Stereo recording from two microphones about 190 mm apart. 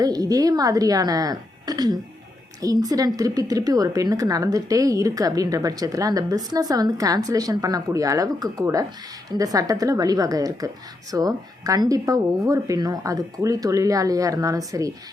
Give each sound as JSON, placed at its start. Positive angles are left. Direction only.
{"t": 0.0, "sound": "a woman's voice", "side_deg": -20}